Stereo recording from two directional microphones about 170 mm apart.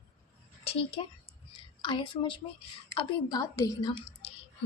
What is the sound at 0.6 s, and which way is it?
A child's voice, 35° left (ahead or behind).